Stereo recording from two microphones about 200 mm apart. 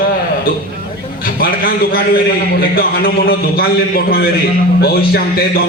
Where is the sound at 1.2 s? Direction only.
45° left (ahead or behind).